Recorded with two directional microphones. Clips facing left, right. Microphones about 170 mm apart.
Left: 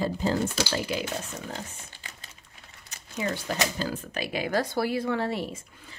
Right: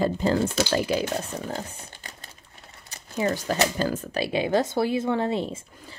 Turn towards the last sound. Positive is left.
turn(degrees=-20)  # may be behind; listen again after turning